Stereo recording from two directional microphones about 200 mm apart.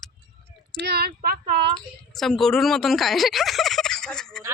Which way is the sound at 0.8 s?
55° right (ahead or behind).